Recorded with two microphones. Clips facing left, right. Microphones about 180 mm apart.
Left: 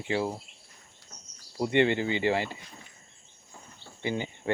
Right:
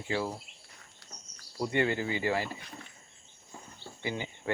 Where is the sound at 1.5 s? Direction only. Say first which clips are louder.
Left 5 dB; 20° left (ahead or behind).